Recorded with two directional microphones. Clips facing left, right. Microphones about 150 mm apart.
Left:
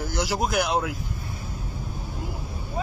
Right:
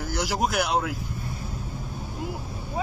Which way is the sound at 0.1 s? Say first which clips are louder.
Even; 10° right (ahead or behind).